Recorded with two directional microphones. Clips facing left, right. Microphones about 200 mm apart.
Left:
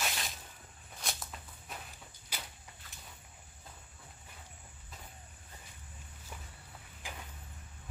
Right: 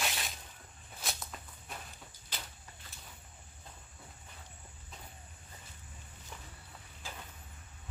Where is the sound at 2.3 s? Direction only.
10° left (ahead or behind).